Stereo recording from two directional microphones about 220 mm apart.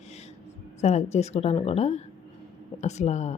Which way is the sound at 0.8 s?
30° left (ahead or behind).